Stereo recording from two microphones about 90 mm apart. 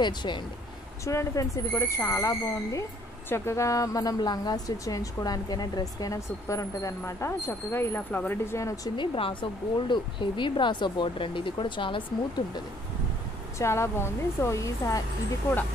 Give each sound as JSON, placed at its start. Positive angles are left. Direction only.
{"t": 0.0, "sound": "speech", "side_deg": 55}
{"t": 1.0, "sound": "a woman's voice", "side_deg": 35}
{"t": 8.5, "sound": "a woman's voice", "side_deg": 35}
{"t": 8.9, "sound": "speech", "side_deg": 70}
{"t": 13.6, "sound": "a woman's voice", "side_deg": 30}